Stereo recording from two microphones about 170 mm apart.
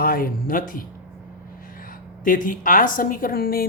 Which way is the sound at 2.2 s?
50° left (ahead or behind).